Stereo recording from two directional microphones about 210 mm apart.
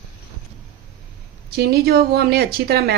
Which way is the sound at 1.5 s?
50° right (ahead or behind).